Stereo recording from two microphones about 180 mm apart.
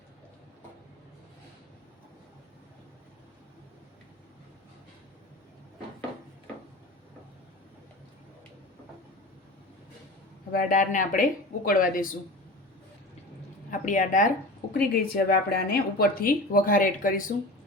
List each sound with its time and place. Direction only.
10.5 s a woman's voice: 50° left (ahead or behind)
13.7 s a woman's voice: 45° left (ahead or behind)
14.7 s a woman's voice: 60° left (ahead or behind)